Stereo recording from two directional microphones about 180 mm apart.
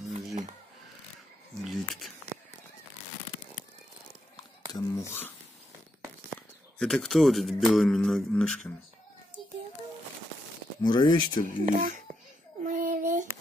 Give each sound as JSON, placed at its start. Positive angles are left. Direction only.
{"t": 1.6, "sound": "a sound", "side_deg": 0}
{"t": 4.7, "sound": "speech", "side_deg": 15}
{"t": 6.8, "sound": "speech", "side_deg": 5}
{"t": 10.8, "sound": "speech", "side_deg": 25}
{"t": 11.4, "sound": "speech", "side_deg": -45}
{"t": 12.6, "sound": "child singing", "side_deg": -45}